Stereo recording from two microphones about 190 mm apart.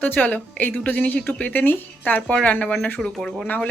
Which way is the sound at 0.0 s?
10° left (ahead or behind).